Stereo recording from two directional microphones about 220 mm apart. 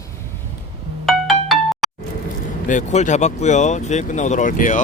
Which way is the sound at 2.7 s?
35° left (ahead or behind).